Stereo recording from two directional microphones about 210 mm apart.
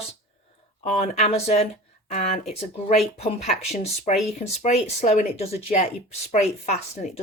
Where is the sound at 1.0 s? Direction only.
30° left (ahead or behind).